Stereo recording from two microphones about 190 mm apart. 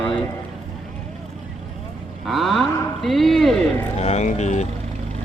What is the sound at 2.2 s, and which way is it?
Speech, centre (ahead or behind).